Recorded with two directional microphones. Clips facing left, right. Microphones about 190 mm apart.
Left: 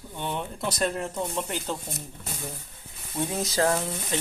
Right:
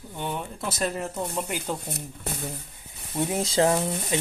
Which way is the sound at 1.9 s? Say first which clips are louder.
Right 4 dB; 65° right (ahead or behind).